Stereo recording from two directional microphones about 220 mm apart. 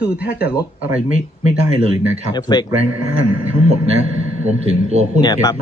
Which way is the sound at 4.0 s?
30° right (ahead or behind).